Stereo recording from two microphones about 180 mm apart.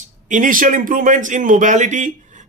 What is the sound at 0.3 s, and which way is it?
Speech, 45° right (ahead or behind).